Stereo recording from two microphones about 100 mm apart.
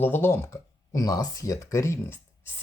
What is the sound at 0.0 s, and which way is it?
Speech, 25° left (ahead or behind).